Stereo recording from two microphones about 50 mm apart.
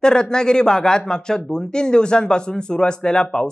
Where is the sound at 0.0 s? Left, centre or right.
Centre.